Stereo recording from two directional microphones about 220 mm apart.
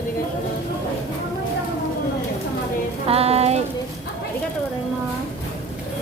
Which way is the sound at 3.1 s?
25° right (ahead or behind).